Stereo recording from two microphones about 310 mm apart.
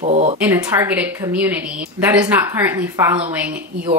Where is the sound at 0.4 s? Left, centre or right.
Centre.